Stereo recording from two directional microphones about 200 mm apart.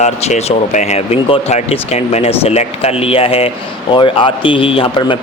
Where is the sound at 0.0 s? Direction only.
35° left (ahead or behind).